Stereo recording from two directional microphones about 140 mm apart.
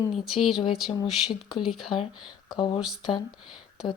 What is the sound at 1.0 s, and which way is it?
Speech, 35° left (ahead or behind).